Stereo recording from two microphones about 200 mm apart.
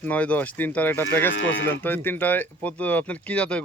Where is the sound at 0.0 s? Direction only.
5° left (ahead or behind).